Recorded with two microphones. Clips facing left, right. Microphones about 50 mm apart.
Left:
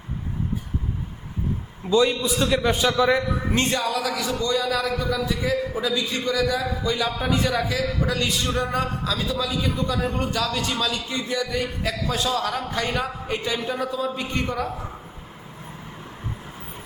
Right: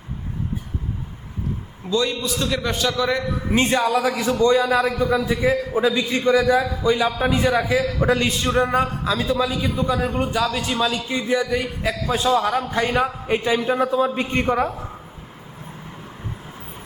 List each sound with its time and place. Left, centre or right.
1.9 s a man's voice: centre
3.5 s a man's voice: centre
8.0 s a man's voice: right